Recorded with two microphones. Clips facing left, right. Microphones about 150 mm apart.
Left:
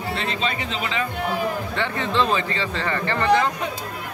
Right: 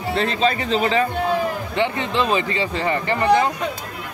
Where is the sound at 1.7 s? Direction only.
15° right (ahead or behind).